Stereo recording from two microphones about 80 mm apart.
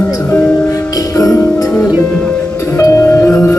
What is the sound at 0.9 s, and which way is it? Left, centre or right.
Music, left.